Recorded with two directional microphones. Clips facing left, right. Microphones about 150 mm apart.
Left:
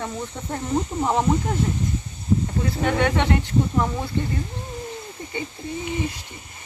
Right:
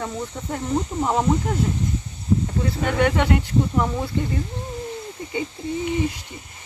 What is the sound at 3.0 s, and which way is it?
Speech, 5° right (ahead or behind).